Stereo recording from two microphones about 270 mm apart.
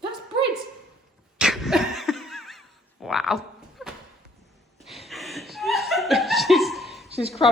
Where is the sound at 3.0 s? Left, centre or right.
Centre.